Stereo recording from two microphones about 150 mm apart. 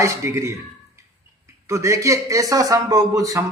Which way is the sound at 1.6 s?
20° right (ahead or behind).